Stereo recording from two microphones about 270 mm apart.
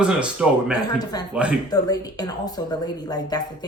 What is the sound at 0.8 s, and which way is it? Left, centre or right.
A woman's voice, centre.